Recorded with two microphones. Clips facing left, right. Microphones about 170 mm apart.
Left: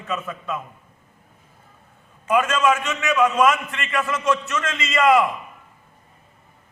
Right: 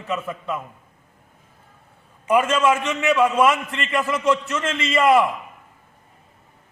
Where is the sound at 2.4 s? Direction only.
30° right (ahead or behind).